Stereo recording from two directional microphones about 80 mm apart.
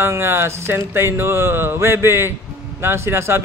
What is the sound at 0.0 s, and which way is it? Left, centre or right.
A man's voice, right.